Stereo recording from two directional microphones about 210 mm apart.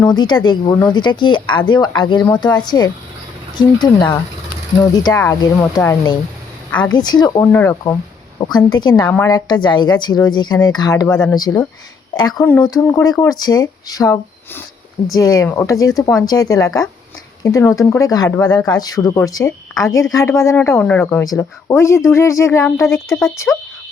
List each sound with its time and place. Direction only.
0.0 s a woman's voice: 20° left (ahead or behind)
6.7 s a woman's voice: 5° left (ahead or behind)
6.9 s a woman's voice: 20° left (ahead or behind)
12.3 s speech: 5° left (ahead or behind)
12.9 s a woman's voice: 15° left (ahead or behind)